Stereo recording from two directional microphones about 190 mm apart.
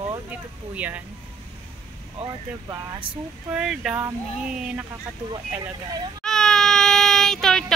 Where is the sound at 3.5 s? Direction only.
5° right (ahead or behind).